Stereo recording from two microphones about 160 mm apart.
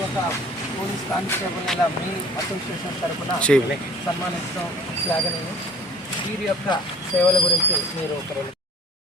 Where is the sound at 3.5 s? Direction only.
Centre (ahead or behind).